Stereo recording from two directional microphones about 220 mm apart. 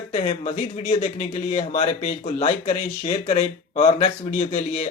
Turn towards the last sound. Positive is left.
turn(degrees=30)  # may be behind; listen again after turning